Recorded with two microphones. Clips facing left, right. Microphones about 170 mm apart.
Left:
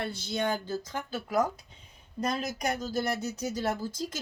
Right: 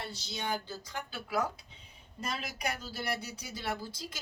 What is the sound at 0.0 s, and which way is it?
Speech, 55° left (ahead or behind).